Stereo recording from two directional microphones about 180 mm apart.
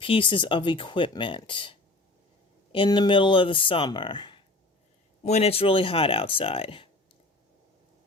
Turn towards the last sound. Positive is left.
turn(degrees=30)  # may be behind; listen again after turning